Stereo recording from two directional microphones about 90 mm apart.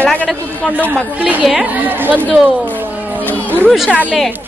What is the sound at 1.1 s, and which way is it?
Speech, 15° right (ahead or behind).